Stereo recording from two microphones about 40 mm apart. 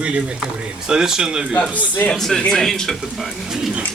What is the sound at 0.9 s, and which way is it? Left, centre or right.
Speech, centre.